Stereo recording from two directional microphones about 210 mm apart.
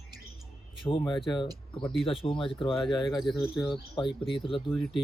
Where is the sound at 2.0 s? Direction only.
25° left (ahead or behind).